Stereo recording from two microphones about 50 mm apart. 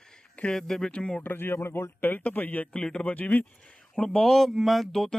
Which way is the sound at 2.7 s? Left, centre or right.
Centre.